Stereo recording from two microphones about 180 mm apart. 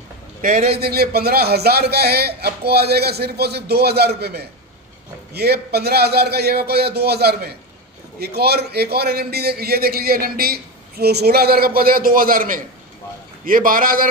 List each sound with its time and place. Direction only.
0.4 s a man's voice: 45° right (ahead or behind)
0.7 s a man's voice: 60° right (ahead or behind)